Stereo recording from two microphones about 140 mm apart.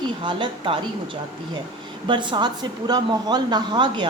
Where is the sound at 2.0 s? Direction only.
35° right (ahead or behind).